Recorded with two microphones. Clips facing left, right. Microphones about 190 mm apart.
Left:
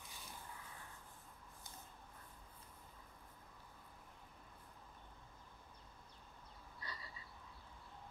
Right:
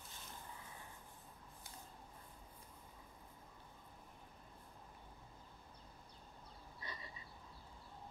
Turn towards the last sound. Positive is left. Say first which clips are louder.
# right 1 dB
turn(degrees=-20)  # may be behind; listen again after turning